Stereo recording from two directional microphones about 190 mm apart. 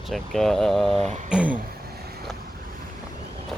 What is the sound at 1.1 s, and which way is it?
Speech, 40° right (ahead or behind).